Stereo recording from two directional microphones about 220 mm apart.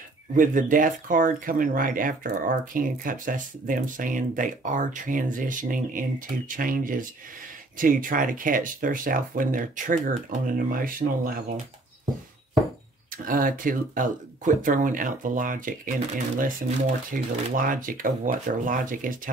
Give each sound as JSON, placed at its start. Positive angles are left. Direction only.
{"t": 0.4, "sound": "speech", "side_deg": -35}
{"t": 13.1, "sound": "speech", "side_deg": -40}
{"t": 17.1, "sound": "speech", "side_deg": -40}